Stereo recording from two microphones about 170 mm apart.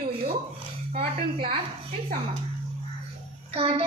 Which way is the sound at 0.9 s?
60° right (ahead or behind).